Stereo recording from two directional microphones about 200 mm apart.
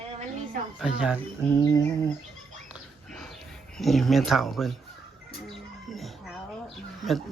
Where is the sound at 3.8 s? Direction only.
Centre (ahead or behind).